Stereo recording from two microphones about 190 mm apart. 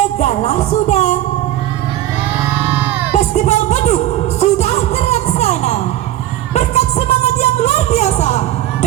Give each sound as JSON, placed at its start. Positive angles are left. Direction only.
{"t": 0.0, "sound": "music", "side_deg": 35}
{"t": 2.5, "sound": "crowd", "side_deg": -10}
{"t": 3.1, "sound": "music", "side_deg": 35}